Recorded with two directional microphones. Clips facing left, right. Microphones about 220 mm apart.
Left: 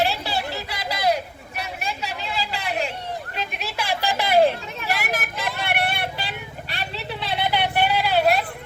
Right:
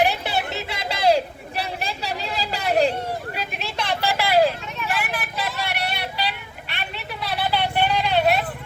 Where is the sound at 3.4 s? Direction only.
Centre (ahead or behind); by 4.5 s 20° left (ahead or behind).